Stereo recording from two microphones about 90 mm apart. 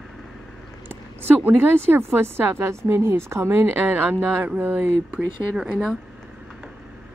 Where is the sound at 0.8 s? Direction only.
25° right (ahead or behind).